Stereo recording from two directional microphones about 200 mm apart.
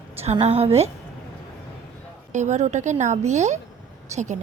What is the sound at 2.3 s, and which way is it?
Speech, 35° right (ahead or behind).